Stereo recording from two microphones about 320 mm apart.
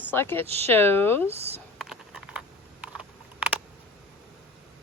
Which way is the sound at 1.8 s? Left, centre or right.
Centre.